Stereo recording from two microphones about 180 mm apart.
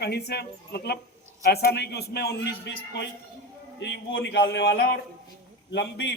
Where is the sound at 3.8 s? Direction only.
75° left (ahead or behind).